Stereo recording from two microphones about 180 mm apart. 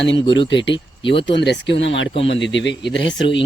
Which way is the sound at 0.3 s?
90° left.